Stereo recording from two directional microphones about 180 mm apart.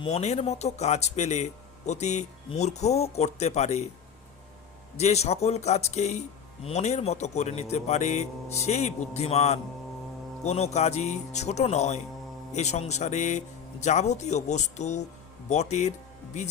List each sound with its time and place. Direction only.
0.0 s speech: 35° left (ahead or behind)
4.9 s speech: 35° left (ahead or behind)